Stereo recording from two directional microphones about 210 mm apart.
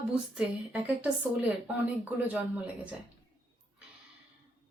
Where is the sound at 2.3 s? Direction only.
5° right (ahead or behind).